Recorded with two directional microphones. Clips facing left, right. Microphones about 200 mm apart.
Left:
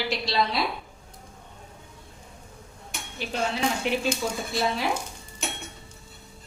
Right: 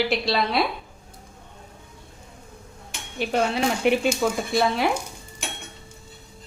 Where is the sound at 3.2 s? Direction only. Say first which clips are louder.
Right 5 dB; 60° right (ahead or behind).